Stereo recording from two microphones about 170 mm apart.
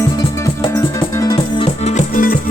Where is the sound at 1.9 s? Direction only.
55° left (ahead or behind).